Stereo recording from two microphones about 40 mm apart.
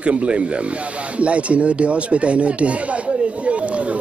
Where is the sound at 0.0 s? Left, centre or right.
Right.